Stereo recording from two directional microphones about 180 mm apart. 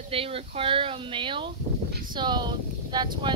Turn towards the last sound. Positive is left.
turn(degrees=-25)  # may be behind; listen again after turning